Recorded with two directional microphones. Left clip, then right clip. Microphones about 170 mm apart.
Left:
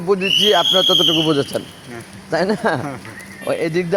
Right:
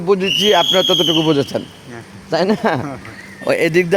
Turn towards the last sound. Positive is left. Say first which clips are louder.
# right 5 dB
turn(degrees=-55)  # may be behind; listen again after turning